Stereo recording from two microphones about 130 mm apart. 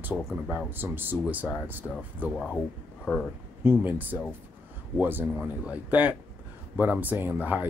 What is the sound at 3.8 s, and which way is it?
Speech, 15° right (ahead or behind).